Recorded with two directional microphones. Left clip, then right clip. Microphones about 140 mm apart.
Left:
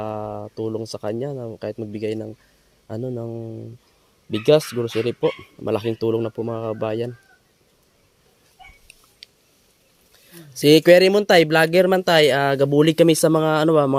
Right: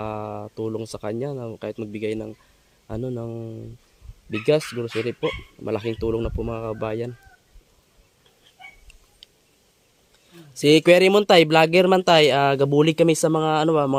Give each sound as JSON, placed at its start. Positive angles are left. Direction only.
{"t": 0.0, "sound": "speech", "side_deg": -15}
{"t": 4.3, "sound": "speech", "side_deg": 5}
{"t": 9.2, "sound": "a sound", "side_deg": 5}
{"t": 10.6, "sound": "speech", "side_deg": -5}